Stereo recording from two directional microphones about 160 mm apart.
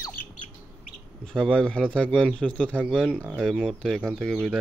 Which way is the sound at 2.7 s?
5° right (ahead or behind).